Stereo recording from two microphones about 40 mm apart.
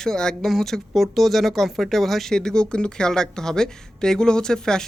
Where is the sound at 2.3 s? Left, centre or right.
Centre.